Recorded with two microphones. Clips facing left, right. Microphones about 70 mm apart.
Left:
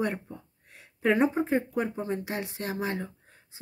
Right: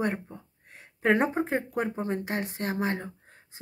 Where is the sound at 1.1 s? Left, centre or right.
Right.